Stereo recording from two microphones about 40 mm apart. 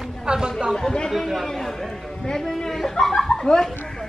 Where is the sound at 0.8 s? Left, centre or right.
Centre.